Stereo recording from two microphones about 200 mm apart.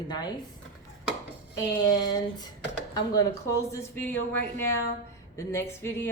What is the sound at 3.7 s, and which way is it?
Speech, 10° left (ahead or behind).